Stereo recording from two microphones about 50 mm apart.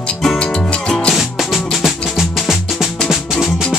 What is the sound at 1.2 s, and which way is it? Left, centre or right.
Music, centre.